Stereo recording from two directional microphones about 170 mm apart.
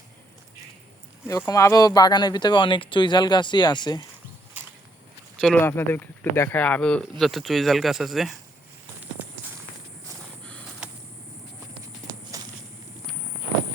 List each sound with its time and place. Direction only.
1.5 s speech: 20° left (ahead or behind)
5.4 s speech: 10° left (ahead or behind)
10.8 s a sound: 5° right (ahead or behind)
12.1 s clip-clop: 20° right (ahead or behind)